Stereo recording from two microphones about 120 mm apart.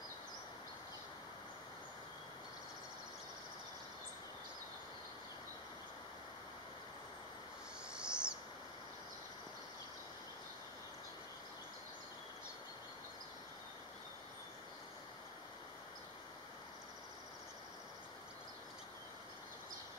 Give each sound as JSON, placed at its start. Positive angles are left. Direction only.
{"t": 7.9, "sound": "owl", "side_deg": -5}